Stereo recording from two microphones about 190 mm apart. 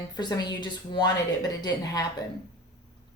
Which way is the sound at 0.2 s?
20° left (ahead or behind).